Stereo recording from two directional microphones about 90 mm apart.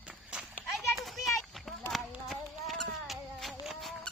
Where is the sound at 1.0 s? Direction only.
Centre (ahead or behind).